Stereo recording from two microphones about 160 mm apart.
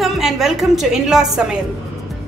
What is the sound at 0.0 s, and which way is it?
A woman's voice, centre (ahead or behind).